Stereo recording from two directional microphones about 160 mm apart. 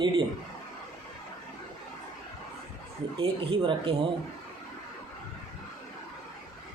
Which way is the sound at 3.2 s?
35° right (ahead or behind).